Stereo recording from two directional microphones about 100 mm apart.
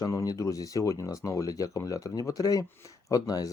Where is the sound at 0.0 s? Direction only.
35° left (ahead or behind).